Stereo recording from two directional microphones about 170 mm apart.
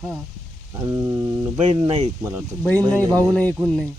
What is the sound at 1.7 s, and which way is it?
Speech, 30° right (ahead or behind).